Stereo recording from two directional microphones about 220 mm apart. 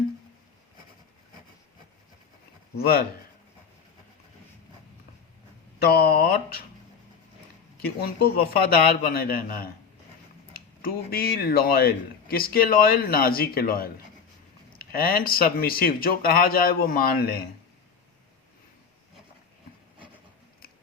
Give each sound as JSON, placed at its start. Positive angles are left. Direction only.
{"t": 2.7, "sound": "speech", "side_deg": 45}
{"t": 5.8, "sound": "speech", "side_deg": 45}
{"t": 7.8, "sound": "speech", "side_deg": 45}